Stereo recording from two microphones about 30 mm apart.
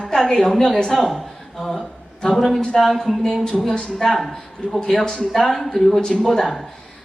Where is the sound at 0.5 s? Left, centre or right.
Centre.